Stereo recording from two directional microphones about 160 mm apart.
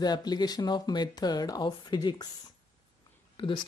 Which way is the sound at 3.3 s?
30° left (ahead or behind).